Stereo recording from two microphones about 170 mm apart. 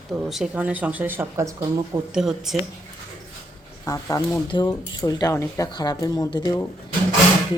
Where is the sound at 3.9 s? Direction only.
20° left (ahead or behind).